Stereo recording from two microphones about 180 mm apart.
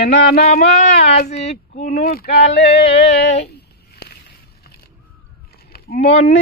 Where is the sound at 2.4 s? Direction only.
35° left (ahead or behind).